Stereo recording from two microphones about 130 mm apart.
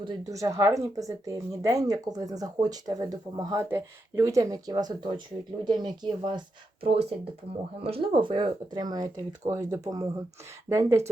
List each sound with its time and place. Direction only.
0.0 s speech: 35° right (ahead or behind)
0.3 s speech: 25° right (ahead or behind)
6.8 s speech: 50° right (ahead or behind); by 11.1 s 20° right (ahead or behind)